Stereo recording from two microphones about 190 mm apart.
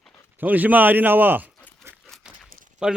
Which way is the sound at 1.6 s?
10° left (ahead or behind).